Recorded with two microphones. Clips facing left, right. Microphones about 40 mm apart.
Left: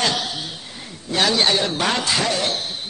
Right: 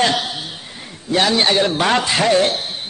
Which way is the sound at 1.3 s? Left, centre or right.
Right.